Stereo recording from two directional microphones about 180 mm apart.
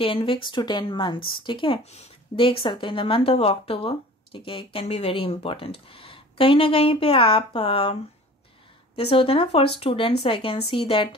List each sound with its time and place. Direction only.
0.0 s speech: 30° left (ahead or behind)